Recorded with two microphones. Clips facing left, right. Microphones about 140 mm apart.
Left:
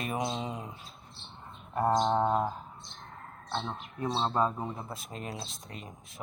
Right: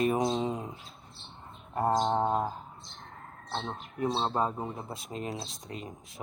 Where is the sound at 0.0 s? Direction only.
35° right (ahead or behind).